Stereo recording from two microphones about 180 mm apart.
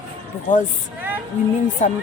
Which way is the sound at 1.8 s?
40° left (ahead or behind).